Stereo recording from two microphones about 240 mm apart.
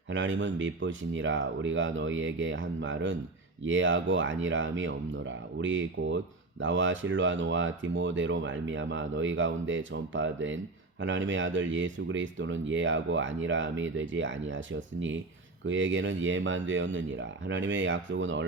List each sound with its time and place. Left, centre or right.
0.1 s speech: right